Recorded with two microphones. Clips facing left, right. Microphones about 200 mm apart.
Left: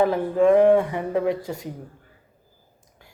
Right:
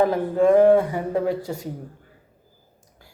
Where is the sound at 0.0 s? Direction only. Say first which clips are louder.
Even; 40° right (ahead or behind).